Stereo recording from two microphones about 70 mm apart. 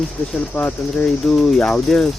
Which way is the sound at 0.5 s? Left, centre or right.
Centre.